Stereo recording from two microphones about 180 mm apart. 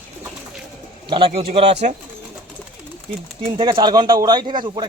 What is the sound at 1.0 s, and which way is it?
Speech, 30° right (ahead or behind).